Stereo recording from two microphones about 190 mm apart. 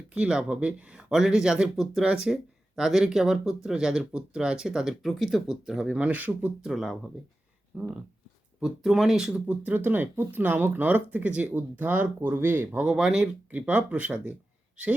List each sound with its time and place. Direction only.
0.1 s speech: 5° right (ahead or behind)